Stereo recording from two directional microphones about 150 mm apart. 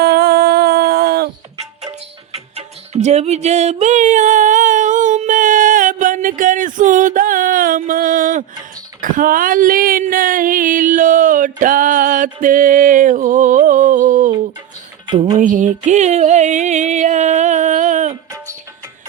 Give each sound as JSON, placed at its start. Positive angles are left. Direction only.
{"t": 0.0, "sound": "music", "side_deg": -90}
{"t": 2.3, "sound": "music", "side_deg": -45}
{"t": 9.0, "sound": "a sound", "side_deg": -65}
{"t": 15.0, "sound": "music", "side_deg": -30}
{"t": 15.4, "sound": "music", "side_deg": -55}